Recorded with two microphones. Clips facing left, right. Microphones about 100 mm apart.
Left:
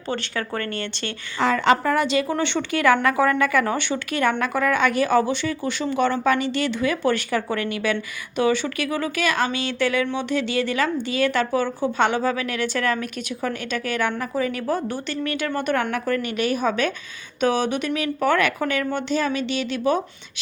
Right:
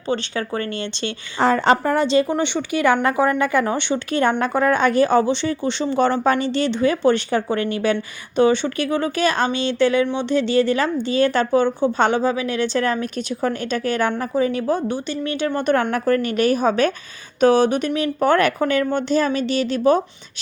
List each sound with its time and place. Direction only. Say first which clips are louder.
0.1 s speech: right 4 dB; 20° right (ahead or behind)
1.4 s speech: right 2 dB; 35° right (ahead or behind)
2.3 s speech: right 2 dB; 15° right (ahead or behind); by 12.2 s 35° right (ahead or behind)
12.2 s speech: right 3 dB; 20° right (ahead or behind); by 20.0 s 35° right (ahead or behind)